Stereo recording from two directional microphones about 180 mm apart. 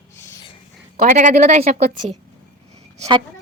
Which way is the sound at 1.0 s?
45° right (ahead or behind).